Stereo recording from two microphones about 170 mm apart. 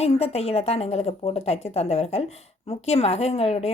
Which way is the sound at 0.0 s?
40° left (ahead or behind).